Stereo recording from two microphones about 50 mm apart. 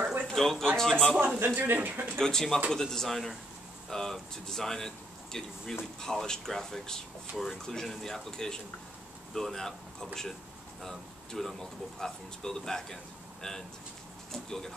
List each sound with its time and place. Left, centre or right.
0.0 s a sound: right
0.3 s a man's voice: centre
1.4 s speech: right
2.1 s a man's voice: centre